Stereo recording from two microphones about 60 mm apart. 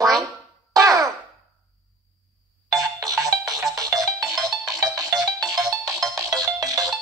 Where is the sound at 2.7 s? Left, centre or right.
Right.